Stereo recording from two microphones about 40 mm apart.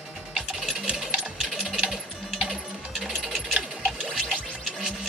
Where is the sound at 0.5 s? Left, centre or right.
Centre.